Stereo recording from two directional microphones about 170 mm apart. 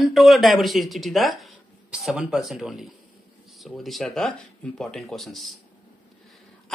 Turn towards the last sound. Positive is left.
turn(degrees=0)  # may be behind; listen again after turning